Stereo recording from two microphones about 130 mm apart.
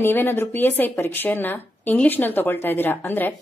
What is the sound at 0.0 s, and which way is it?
A woman's voice, 15° left (ahead or behind).